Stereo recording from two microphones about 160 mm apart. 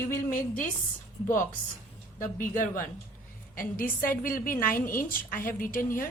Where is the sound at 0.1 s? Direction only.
60° left (ahead or behind).